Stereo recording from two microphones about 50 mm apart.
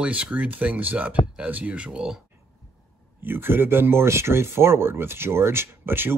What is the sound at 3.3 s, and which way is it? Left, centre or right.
Speech, right.